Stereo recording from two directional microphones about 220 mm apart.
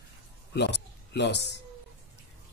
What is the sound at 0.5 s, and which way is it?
Speech, 50° left (ahead or behind).